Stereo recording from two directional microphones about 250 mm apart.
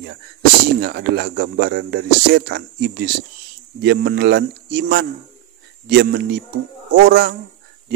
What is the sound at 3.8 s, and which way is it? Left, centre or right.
Speech, right.